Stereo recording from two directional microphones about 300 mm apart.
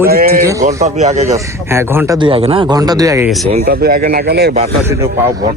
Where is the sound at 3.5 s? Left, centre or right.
Right.